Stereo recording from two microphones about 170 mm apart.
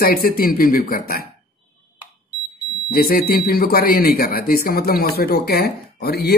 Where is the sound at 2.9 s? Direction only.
60° left (ahead or behind).